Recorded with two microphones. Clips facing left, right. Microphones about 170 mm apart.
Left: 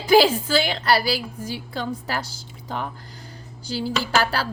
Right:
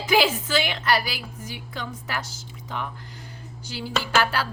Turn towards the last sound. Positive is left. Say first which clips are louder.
# left 1 dB
turn(degrees=35)  # may be behind; listen again after turning